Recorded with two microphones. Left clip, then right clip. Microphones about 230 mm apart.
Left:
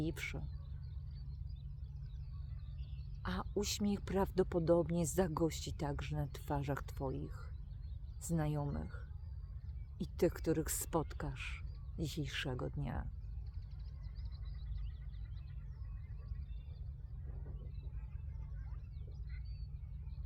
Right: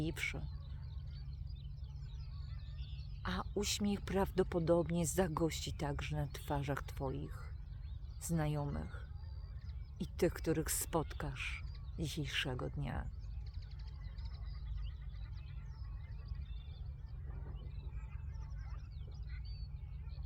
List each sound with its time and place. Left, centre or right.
0.0 s speech: centre
3.2 s speech: centre
10.0 s speech: centre